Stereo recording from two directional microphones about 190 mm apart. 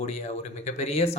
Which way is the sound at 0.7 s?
35° left (ahead or behind).